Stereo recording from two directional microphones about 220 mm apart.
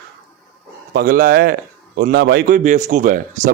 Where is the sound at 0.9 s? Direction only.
40° right (ahead or behind).